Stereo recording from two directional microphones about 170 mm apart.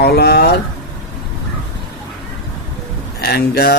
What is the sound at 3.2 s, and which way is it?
Speech, 70° left (ahead or behind).